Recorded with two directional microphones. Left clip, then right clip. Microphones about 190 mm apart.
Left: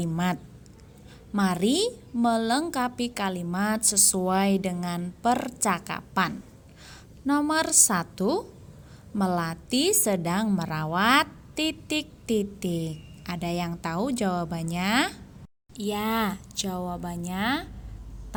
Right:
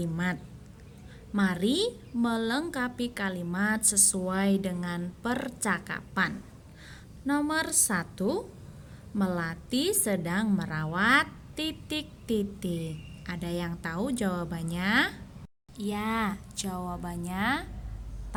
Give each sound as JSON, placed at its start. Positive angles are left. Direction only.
{"t": 0.0, "sound": "a woman's voice", "side_deg": 30}